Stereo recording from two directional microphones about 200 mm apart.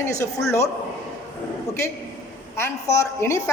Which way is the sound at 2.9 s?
15° left (ahead or behind).